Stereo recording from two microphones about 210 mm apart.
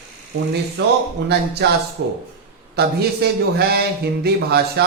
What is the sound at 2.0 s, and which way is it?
Speech, 55° right (ahead or behind).